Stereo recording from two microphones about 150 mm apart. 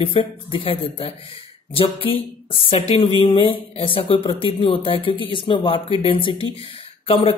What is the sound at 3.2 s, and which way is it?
Speech, 35° left (ahead or behind).